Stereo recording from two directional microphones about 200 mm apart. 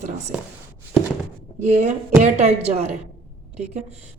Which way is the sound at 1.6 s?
35° right (ahead or behind).